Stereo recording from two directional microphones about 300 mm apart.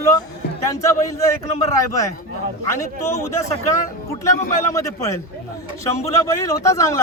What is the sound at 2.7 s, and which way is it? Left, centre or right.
A man's voice, centre.